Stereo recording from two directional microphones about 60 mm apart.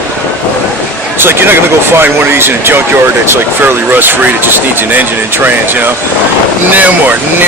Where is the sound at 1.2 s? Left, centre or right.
Right.